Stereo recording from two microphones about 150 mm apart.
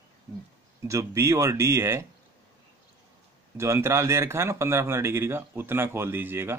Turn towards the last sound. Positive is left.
turn(degrees=-15)  # may be behind; listen again after turning